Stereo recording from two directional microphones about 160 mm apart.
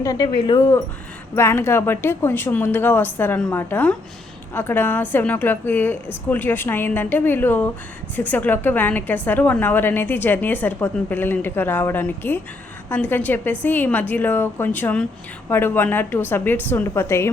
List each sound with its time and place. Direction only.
0.0 s speech: 20° left (ahead or behind)
1.4 s a woman's voice: 15° left (ahead or behind)